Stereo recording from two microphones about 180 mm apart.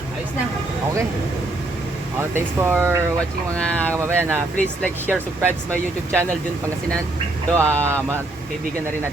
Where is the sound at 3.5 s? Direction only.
10° left (ahead or behind).